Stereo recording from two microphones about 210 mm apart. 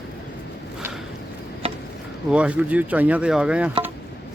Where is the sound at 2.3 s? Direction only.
5° right (ahead or behind).